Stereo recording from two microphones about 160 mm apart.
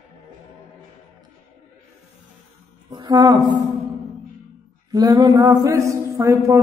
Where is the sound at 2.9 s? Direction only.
25° right (ahead or behind).